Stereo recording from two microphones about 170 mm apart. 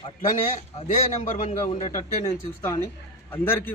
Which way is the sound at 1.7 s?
25° left (ahead or behind).